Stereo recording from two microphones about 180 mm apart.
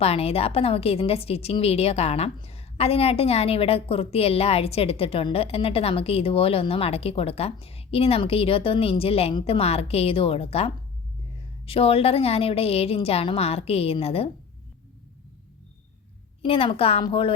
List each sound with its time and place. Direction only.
0.0 s a woman's voice: 35° left (ahead or behind)
16.4 s a woman's voice: 30° left (ahead or behind)